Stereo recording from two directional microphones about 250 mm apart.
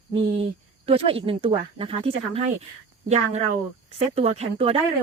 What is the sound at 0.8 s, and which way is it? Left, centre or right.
Speech, right.